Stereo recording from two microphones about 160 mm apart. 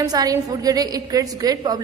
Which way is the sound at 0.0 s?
25° right (ahead or behind).